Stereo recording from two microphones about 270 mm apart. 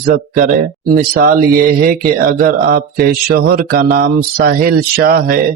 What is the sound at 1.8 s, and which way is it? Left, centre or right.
Speech, right.